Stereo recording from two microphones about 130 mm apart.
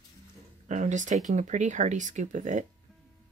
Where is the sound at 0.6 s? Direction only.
70° right (ahead or behind).